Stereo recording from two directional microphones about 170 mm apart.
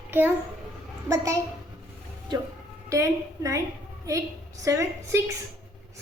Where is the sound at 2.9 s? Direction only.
20° right (ahead or behind).